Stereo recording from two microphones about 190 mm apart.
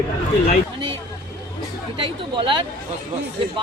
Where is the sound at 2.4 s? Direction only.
25° right (ahead or behind).